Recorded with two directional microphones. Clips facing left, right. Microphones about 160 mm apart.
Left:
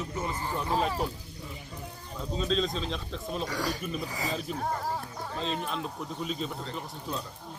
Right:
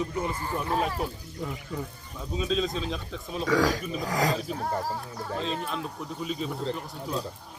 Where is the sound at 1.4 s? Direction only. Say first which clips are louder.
Right 11 dB; 90° right.